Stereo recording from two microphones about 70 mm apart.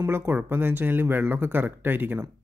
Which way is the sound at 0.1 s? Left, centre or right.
Right.